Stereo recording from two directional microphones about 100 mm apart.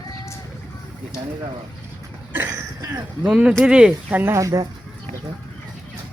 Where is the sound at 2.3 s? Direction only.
25° right (ahead or behind).